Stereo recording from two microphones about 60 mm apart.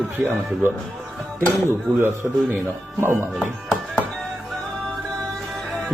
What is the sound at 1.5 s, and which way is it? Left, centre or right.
Speech, right.